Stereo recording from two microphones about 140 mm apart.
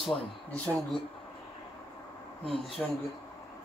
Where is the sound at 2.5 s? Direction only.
40° left (ahead or behind).